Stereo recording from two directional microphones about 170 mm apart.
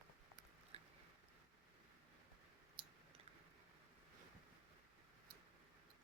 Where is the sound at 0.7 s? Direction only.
35° right (ahead or behind).